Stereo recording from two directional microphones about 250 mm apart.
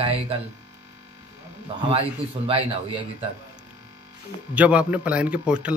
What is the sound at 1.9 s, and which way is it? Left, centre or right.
Speech, right.